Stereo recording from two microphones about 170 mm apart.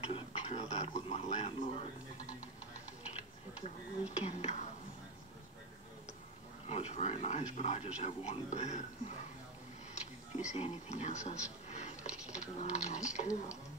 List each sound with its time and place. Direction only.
0.0 s speech: 35° left (ahead or behind)
4.2 s speech: 40° left (ahead or behind)
6.7 s speech: 40° left (ahead or behind)
10.3 s speech: 40° left (ahead or behind)